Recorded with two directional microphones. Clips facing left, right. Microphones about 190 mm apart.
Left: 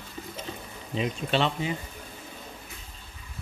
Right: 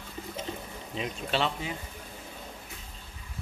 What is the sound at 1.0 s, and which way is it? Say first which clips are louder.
Speech: left 4 dB; 5° right (ahead or behind).